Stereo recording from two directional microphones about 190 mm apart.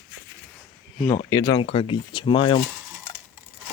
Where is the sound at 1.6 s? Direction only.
30° left (ahead or behind).